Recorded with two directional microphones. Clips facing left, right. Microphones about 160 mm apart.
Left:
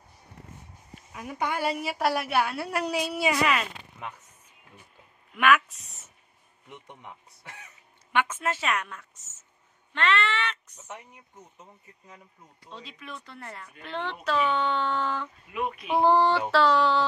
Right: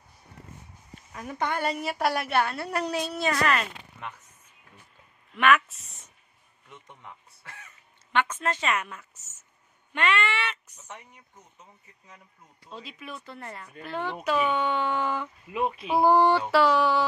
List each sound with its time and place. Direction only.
1.1 s a woman's voice: 10° left (ahead or behind)
5.3 s speech: centre (ahead or behind)
6.7 s speech: 20° left (ahead or behind); by 10.8 s 10° right (ahead or behind)
10.8 s a woman's voice: 5° left (ahead or behind)
12.6 s speech: 10° right (ahead or behind)
15.5 s speech: 30° right (ahead or behind)
15.9 s speech: 10° right (ahead or behind)